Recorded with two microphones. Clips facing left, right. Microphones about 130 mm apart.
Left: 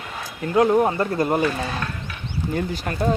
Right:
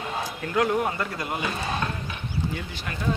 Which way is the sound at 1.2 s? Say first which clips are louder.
Left 10 dB; 45° left (ahead or behind).